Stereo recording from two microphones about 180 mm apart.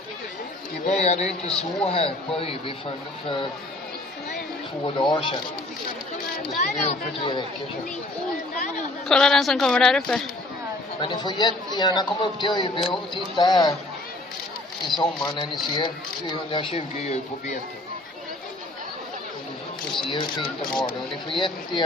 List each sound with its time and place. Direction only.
0.9 s a man's voice: 40° left (ahead or behind)
4.9 s speech: 25° left (ahead or behind)
6.6 s a man's voice: 40° left (ahead or behind)
8.5 s a sound: 45° left (ahead or behind)
9.0 s speech: 5° left (ahead or behind)
11.0 s speech: 25° left (ahead or behind)
15.2 s speech: 25° left (ahead or behind)
20.0 s speech: 25° left (ahead or behind)